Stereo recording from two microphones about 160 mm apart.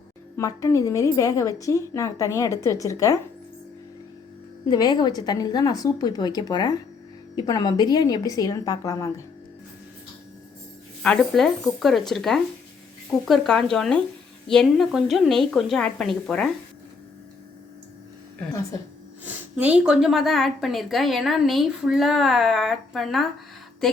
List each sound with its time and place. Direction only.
0.3 s a woman's voice: 20° left (ahead or behind)
4.7 s a woman's voice: 25° left (ahead or behind)
11.0 s a woman's voice: 5° left (ahead or behind)
19.2 s a woman's voice: 10° right (ahead or behind)